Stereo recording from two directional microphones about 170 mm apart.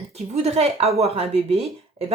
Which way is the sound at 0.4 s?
35° right (ahead or behind).